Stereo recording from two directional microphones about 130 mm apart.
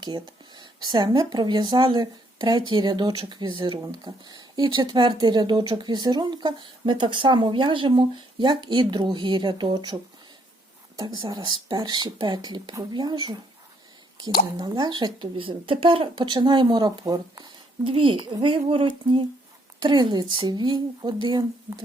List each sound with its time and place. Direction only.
0.0 s speech: 35° right (ahead or behind)
11.3 s speech: 35° right (ahead or behind)